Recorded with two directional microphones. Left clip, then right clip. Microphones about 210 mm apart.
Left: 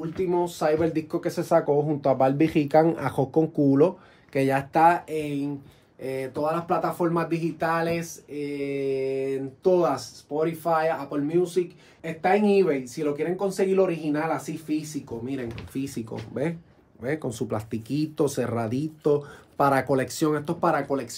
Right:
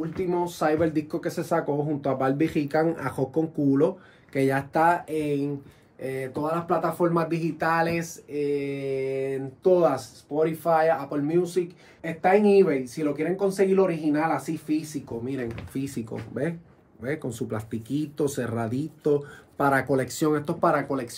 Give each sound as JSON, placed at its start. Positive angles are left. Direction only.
{"t": 0.1, "sound": "speech", "side_deg": 0}
{"t": 1.1, "sound": "speech", "side_deg": 0}
{"t": 2.0, "sound": "speech", "side_deg": 40}
{"t": 2.3, "sound": "speech", "side_deg": 0}
{"t": 2.7, "sound": "speech", "side_deg": 40}
{"t": 3.7, "sound": "speech", "side_deg": 30}
{"t": 17.0, "sound": "speech", "side_deg": 25}
{"t": 20.0, "sound": "speech", "side_deg": 15}